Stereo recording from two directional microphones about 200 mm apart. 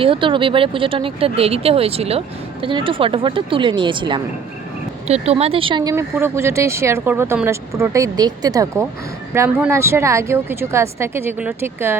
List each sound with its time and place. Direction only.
0.0 s speech: 25° right (ahead or behind)